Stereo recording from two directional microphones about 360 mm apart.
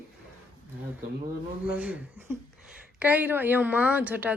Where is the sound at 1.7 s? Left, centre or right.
Centre.